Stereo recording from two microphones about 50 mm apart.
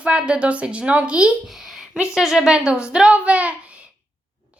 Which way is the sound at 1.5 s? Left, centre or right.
Centre.